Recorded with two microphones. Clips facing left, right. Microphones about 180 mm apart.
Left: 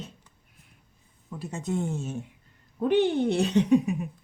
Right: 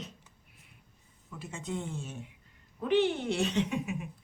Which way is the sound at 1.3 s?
35° left (ahead or behind).